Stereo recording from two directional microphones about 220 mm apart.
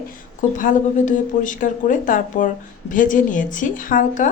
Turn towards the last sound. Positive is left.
turn(degrees=35)  # may be behind; listen again after turning